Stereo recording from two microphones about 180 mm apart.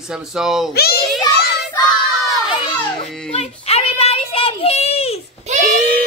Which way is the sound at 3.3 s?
35° left (ahead or behind).